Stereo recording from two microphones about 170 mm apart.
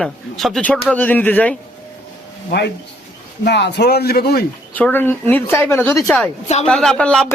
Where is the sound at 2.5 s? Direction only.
75° left (ahead or behind).